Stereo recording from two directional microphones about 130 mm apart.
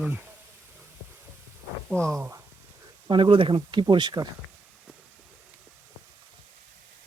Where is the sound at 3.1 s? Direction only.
40° right (ahead or behind).